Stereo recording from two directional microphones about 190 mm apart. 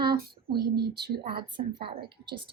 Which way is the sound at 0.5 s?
55° right (ahead or behind).